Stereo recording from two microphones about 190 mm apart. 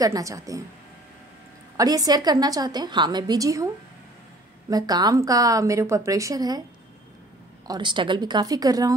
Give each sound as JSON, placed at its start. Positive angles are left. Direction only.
{"t": 0.0, "sound": "a woman's voice", "side_deg": -15}
{"t": 1.8, "sound": "a woman's voice", "side_deg": -20}
{"t": 7.6, "sound": "a woman's voice", "side_deg": -25}